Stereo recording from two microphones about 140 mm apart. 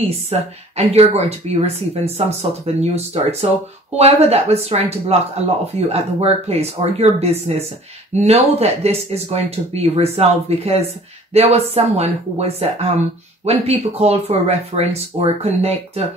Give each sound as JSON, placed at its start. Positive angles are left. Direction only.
{"t": 0.0, "sound": "speech", "side_deg": -50}